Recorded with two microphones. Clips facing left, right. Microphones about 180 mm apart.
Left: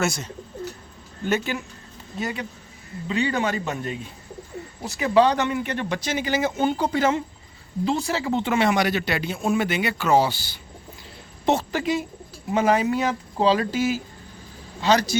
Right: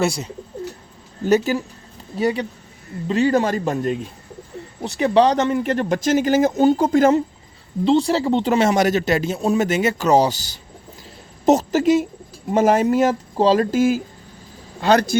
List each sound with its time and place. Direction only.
1.2 s speech: 40° right (ahead or behind)
4.9 s speech: 35° right (ahead or behind)
7.9 s speech: 30° right (ahead or behind); by 15.2 s 55° right (ahead or behind)